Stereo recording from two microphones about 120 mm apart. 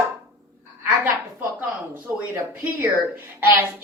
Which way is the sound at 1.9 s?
15° right (ahead or behind).